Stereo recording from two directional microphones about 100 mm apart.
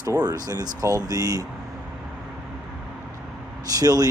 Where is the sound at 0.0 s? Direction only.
40° right (ahead or behind).